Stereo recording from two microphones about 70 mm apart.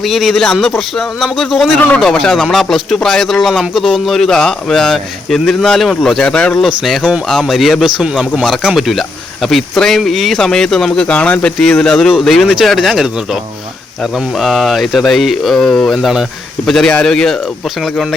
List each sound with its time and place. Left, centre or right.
0.0 s speech: centre
7.3 s speech: centre
11.1 s speech: centre
16.0 s speech: centre
16.6 s speech: centre